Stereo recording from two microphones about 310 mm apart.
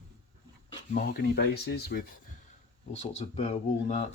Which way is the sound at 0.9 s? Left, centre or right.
Left.